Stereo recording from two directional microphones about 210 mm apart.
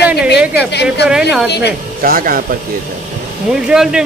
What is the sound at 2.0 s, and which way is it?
Speech, 45° right (ahead or behind).